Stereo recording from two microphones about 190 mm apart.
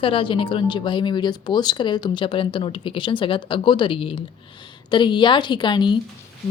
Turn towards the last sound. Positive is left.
turn(degrees=25)  # may be behind; listen again after turning